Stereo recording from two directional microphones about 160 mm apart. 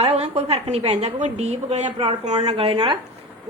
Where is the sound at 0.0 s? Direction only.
40° right (ahead or behind).